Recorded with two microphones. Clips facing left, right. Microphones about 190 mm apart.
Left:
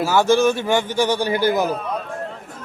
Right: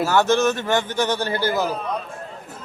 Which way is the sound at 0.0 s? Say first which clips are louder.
Left 2 dB; 10° left (ahead or behind).